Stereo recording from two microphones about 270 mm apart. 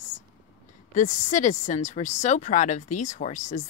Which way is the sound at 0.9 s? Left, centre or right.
Left.